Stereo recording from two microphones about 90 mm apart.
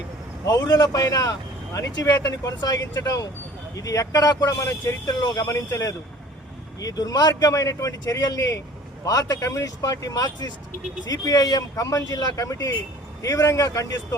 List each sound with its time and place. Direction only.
0.4 s speech: 45° left (ahead or behind)